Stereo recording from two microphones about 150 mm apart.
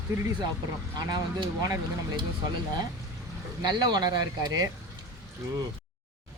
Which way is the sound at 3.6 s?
25° right (ahead or behind).